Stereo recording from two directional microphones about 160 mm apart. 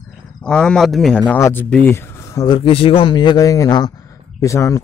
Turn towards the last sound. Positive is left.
turn(degrees=20)  # may be behind; listen again after turning